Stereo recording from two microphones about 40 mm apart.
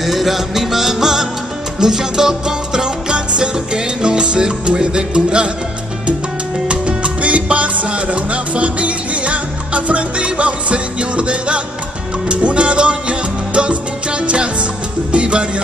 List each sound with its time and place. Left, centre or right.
0.0 s music: centre; by 5.5 s right
6.7 s music: right